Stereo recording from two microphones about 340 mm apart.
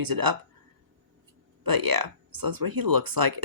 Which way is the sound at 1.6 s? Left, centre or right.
Right.